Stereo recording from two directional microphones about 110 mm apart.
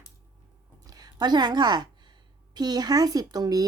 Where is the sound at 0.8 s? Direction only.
35° right (ahead or behind).